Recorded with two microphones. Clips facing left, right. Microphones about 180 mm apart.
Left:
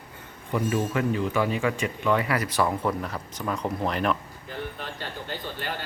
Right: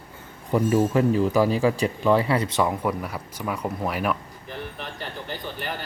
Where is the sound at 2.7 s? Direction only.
10° right (ahead or behind).